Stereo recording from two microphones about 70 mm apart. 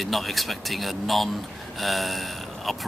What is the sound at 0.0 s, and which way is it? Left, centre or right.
Speech, centre.